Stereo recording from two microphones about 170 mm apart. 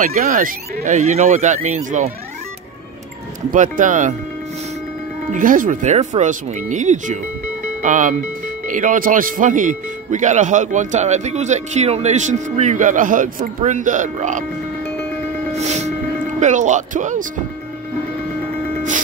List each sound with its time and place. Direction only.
0.0 s speech: 55° right (ahead or behind)
3.5 s speech: 50° right (ahead or behind)
5.3 s speech: 50° right (ahead or behind)
15.5 s music: 40° right (ahead or behind)
16.3 s speech: 45° right (ahead or behind)